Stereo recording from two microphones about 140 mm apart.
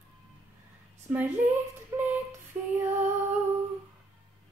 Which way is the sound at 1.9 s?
15° right (ahead or behind).